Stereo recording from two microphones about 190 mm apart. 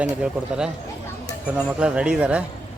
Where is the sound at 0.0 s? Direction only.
5° right (ahead or behind).